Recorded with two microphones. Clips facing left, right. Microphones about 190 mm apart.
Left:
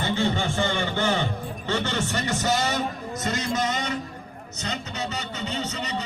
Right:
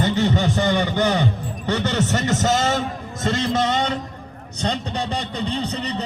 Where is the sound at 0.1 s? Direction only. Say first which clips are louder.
Right 5 dB; 50° left (ahead or behind).